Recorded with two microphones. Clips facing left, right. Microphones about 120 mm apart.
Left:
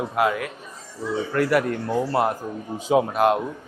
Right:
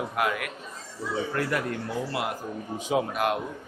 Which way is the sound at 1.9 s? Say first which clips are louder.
Left 8 dB; 45° left (ahead or behind).